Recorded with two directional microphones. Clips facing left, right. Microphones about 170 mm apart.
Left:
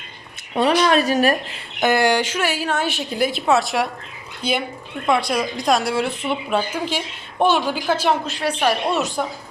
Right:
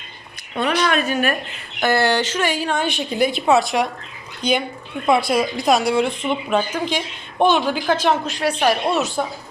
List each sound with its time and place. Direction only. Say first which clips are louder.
0.5 s speech: left 3 dB; 35° left (ahead or behind)
1.8 s speech: left 1 dB; 15° left (ahead or behind)
5.0 s speech: right 2 dB; 5° right (ahead or behind)
8.4 s speech: right 1 dB; 10° right (ahead or behind)